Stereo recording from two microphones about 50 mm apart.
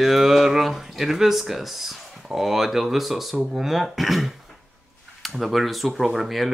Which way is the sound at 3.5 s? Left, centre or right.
Centre.